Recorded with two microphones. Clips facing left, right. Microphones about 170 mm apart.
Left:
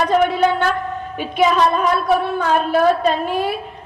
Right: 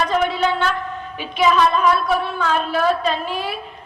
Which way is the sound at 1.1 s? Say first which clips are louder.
Left 1 dB; 50° left (ahead or behind).